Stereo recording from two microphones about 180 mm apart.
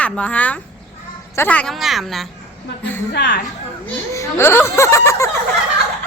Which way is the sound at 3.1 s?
65° left (ahead or behind).